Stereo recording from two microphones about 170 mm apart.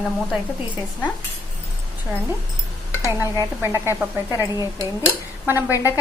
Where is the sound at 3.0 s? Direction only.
15° right (ahead or behind).